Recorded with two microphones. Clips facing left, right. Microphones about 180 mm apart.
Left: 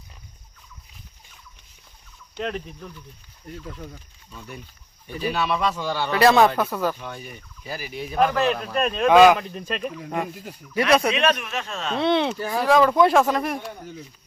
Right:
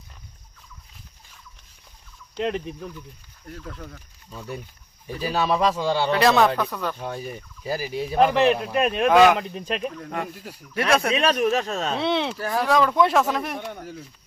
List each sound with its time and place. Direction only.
2.3 s fowl: 20° right (ahead or behind)
3.6 s speech: 5° left (ahead or behind)
4.3 s speech: 35° right (ahead or behind)
6.1 s speech: centre (ahead or behind)
7.6 s speech: 35° right (ahead or behind)
8.2 s speech: 20° right (ahead or behind)
9.0 s speech: centre (ahead or behind)
11.1 s speech: 35° right (ahead or behind)
11.9 s speech: 5° right (ahead or behind)